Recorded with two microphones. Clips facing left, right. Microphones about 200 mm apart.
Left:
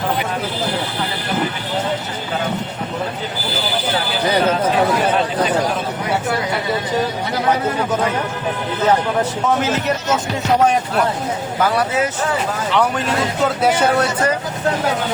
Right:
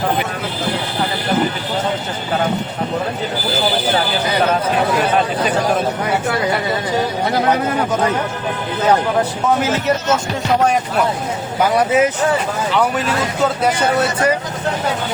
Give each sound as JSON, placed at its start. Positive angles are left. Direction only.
{"t": 11.6, "sound": "speech", "side_deg": -15}
{"t": 13.4, "sound": "speech", "side_deg": 5}